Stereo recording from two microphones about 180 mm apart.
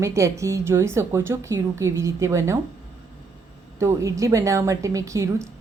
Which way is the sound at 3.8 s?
15° right (ahead or behind).